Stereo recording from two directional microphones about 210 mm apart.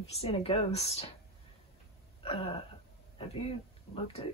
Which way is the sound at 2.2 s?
25° left (ahead or behind).